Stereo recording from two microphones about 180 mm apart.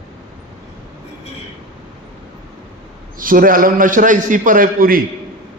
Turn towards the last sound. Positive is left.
turn(degrees=-50)  # may be behind; listen again after turning